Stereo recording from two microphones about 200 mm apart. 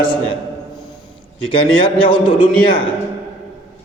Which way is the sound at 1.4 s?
25° left (ahead or behind).